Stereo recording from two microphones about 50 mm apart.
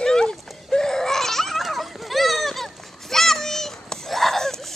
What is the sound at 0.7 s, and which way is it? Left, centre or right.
Babbling, centre.